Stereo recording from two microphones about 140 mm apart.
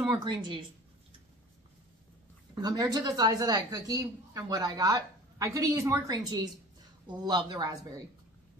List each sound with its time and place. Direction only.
0.2 s speech: 30° right (ahead or behind)
2.5 s speech: 30° right (ahead or behind)